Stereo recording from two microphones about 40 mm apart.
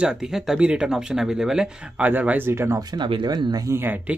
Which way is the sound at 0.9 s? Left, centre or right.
Centre.